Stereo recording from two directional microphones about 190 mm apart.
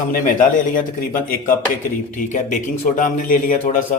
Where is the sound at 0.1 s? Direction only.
45° left (ahead or behind).